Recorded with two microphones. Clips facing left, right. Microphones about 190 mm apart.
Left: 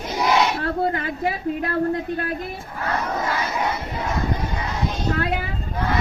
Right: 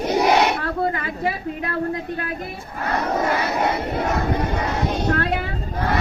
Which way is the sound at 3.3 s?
60° right (ahead or behind).